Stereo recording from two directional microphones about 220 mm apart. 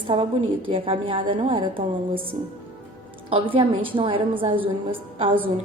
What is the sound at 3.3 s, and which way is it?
A woman's voice, 25° right (ahead or behind).